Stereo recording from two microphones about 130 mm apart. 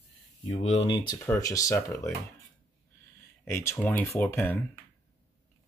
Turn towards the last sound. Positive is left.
turn(degrees=15)  # may be behind; listen again after turning